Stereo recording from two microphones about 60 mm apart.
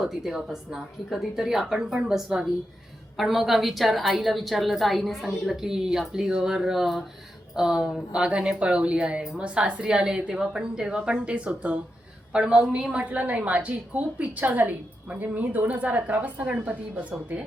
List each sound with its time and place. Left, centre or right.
0.0 s a woman's voice: centre; by 17.4 s right